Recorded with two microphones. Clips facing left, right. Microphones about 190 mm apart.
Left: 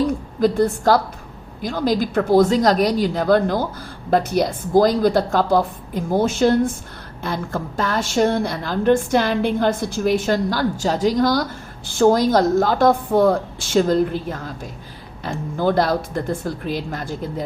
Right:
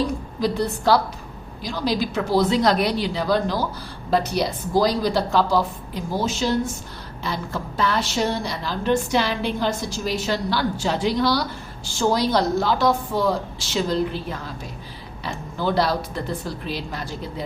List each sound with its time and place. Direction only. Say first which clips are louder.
0.1 s a woman's voice: left 5 dB; 50° left (ahead or behind)